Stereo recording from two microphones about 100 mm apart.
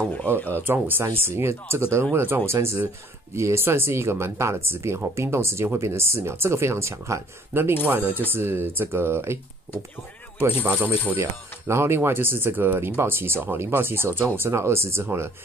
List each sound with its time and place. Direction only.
0.1 s speech: 15° left (ahead or behind)
0.7 s speech: 20° right (ahead or behind)
10.6 s speech: 15° right (ahead or behind)
11.1 s speech: 25° right (ahead or behind)